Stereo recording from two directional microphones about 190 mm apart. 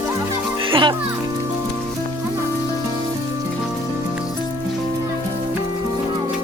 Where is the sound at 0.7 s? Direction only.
25° right (ahead or behind).